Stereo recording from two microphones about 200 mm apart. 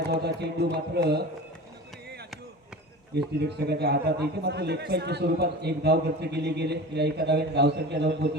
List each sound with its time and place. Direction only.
0.1 s a man's voice: 55° right (ahead or behind)
3.4 s a man's voice: 55° right (ahead or behind)